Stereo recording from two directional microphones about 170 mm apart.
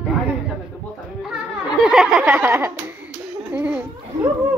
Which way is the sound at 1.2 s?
5° right (ahead or behind).